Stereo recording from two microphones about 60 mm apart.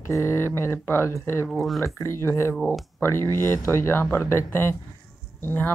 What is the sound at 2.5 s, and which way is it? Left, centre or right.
Speech, centre.